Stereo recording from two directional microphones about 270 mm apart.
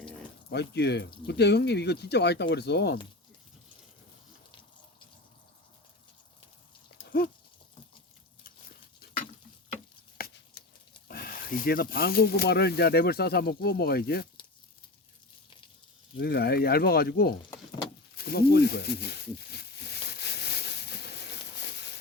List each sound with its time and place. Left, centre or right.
0.5 s speech: left
7.0 s dog: left
8.4 s dog: left
10.2 s a sound: left
11.1 s speech: left
16.1 s speech: left
18.2 s a sound: left